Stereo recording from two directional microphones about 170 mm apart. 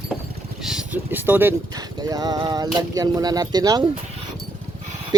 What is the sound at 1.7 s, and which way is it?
Speech, 20° right (ahead or behind).